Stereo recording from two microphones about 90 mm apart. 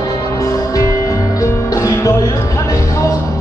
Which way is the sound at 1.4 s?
35° left (ahead or behind).